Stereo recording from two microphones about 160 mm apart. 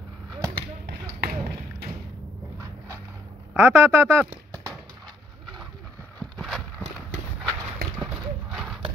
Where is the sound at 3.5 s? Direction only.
15° right (ahead or behind).